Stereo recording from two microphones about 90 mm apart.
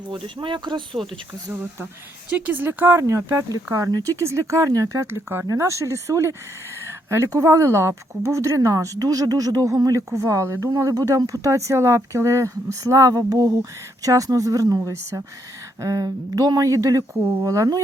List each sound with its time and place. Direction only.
0.1 s speech: 65° right (ahead or behind)
2.3 s speech: 20° right (ahead or behind)
3.0 s speech: 35° right (ahead or behind)
15.8 s speech: 40° right (ahead or behind)